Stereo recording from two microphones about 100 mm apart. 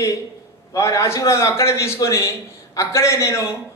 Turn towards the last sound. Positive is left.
turn(degrees=30)  # may be behind; listen again after turning